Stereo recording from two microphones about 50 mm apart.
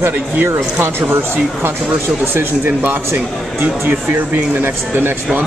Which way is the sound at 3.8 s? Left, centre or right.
Right.